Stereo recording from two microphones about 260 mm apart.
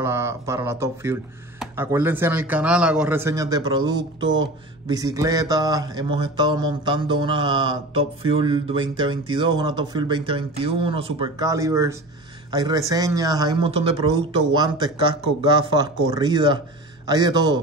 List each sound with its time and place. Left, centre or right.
0.0 s speech: centre
3.8 s speech: right
4.8 s speech: centre
8.2 s a sound: right
9.0 s speech: centre